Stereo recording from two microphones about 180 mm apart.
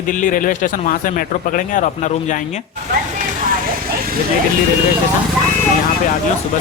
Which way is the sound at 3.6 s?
55° right (ahead or behind).